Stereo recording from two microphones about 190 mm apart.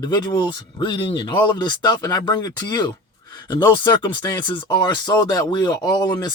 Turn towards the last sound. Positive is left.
turn(degrees=20)  # may be behind; listen again after turning